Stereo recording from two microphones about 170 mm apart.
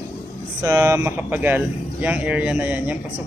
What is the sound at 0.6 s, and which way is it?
Speech, 15° right (ahead or behind).